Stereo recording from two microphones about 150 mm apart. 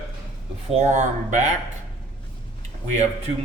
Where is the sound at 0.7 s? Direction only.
50° right (ahead or behind).